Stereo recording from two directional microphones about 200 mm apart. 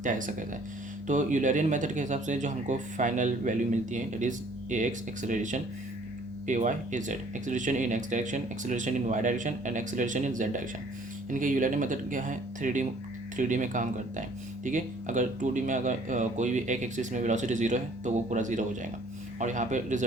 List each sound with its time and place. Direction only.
0.0 s speech: 40° right (ahead or behind)